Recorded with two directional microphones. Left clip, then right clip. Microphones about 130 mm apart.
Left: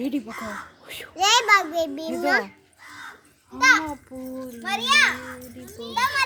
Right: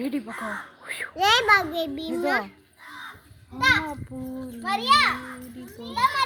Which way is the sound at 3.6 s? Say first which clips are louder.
Left 3 dB; 50° left (ahead or behind).